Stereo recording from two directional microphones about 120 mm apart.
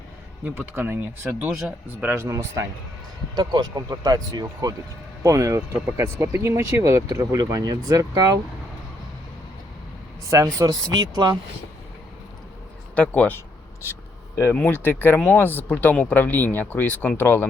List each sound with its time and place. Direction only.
0.4 s speech: 15° right (ahead or behind)
3.3 s speech: 35° right (ahead or behind)
10.2 s speech: 25° right (ahead or behind)
13.0 s speech: 10° left (ahead or behind)
14.5 s speech: 15° left (ahead or behind)